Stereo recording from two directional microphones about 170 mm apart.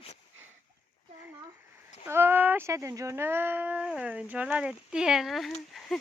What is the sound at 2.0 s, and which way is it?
Speech, 15° right (ahead or behind).